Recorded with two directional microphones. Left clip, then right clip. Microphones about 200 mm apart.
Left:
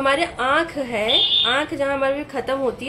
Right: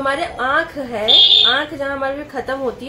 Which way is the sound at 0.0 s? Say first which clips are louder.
Even; 25° left (ahead or behind).